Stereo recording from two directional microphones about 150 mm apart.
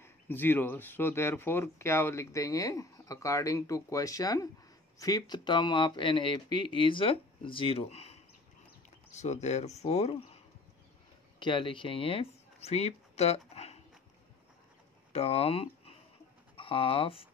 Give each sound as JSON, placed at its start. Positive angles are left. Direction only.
{"t": 0.0, "sound": "speech", "side_deg": 15}
{"t": 11.3, "sound": "speech", "side_deg": 30}
{"t": 15.1, "sound": "speech", "side_deg": 40}